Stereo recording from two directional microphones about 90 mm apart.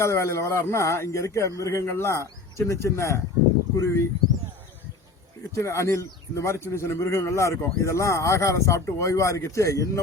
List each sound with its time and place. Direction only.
0.0 s a man's voice: 30° left (ahead or behind)
5.5 s a man's voice: 30° left (ahead or behind)